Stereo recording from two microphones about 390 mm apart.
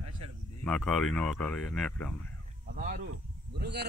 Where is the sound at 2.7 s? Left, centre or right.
Right.